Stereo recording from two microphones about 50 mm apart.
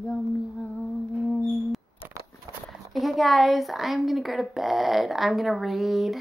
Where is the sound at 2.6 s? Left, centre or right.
Centre.